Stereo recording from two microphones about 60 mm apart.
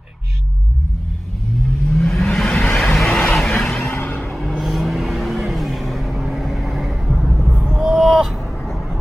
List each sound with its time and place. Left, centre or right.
1.9 s car: centre
2.3 s a sound: centre
2.7 s vehicle: centre
3.9 s vehicle: left
4.3 s vehicle: centre
7.5 s a sound: centre